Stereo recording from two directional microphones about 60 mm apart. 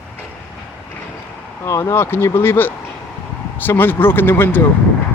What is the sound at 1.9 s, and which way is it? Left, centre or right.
Speech, left.